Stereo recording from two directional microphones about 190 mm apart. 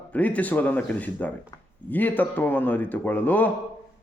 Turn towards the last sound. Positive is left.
turn(degrees=10)  # may be behind; listen again after turning